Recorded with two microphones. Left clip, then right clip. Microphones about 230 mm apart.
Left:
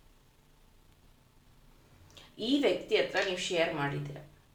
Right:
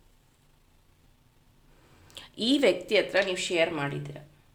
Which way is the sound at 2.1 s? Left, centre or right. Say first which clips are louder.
Right 4 dB; right.